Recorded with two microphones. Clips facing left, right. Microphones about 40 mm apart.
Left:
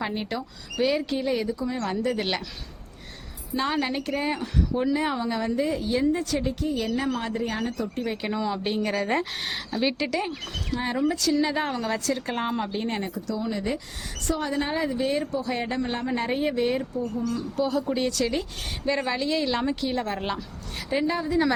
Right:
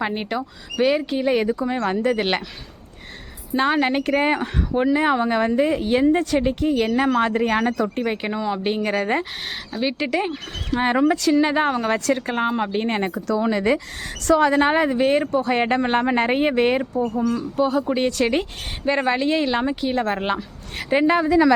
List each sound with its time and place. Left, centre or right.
0.0 s speech: right
1.3 s speech: right
3.5 s a woman's voice: right
8.2 s speech: right
9.5 s speech: centre
10.1 s speech: right
10.7 s a woman's voice: right
12.2 s speech: centre; by 13.3 s right
13.3 s speech: right
14.3 s a woman's voice: right
18.9 s speech: right
20.0 s speech: right
20.7 s a woman's voice: right